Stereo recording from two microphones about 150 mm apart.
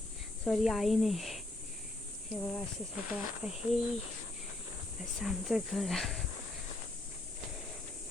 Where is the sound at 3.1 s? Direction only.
5° right (ahead or behind).